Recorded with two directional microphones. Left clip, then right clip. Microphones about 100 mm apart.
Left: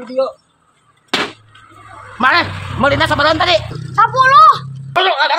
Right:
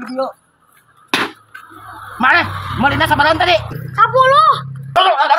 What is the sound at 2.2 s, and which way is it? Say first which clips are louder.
A man's voice: even; 25° left (ahead or behind).